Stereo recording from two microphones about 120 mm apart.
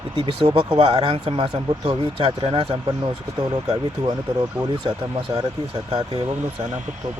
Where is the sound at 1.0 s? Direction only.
55° right (ahead or behind).